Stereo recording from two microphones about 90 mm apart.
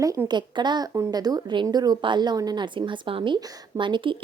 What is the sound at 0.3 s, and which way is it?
Speech, 55° right (ahead or behind).